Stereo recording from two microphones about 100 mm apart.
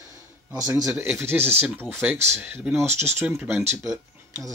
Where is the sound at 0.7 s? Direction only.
25° right (ahead or behind).